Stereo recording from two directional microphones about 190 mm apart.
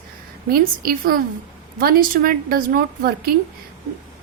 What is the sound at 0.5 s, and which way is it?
A woman's voice, 50° right (ahead or behind).